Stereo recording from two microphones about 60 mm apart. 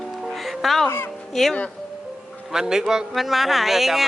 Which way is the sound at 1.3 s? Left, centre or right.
Centre.